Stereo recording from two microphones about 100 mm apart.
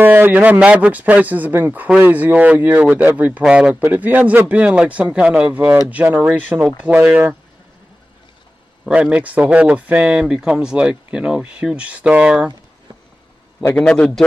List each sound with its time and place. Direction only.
0.0 s speech: 20° right (ahead or behind)
8.8 s speech: 10° right (ahead or behind)
13.7 s a man's voice: 10° left (ahead or behind)